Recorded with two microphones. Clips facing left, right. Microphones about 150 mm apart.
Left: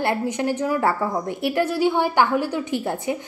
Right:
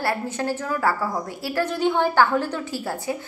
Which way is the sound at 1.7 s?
10° left (ahead or behind).